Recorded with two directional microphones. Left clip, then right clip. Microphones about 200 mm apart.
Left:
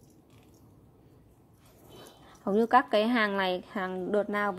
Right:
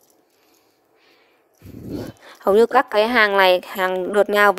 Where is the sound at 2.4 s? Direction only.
35° right (ahead or behind).